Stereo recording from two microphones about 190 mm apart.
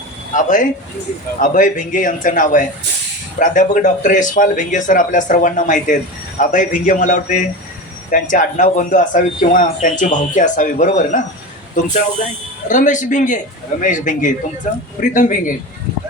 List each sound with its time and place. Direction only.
0.3 s speech: 40° left (ahead or behind)
12.6 s speech: 40° left (ahead or behind)